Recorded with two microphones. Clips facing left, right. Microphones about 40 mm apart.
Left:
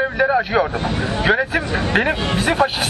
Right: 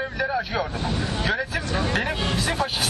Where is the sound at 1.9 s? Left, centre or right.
Left.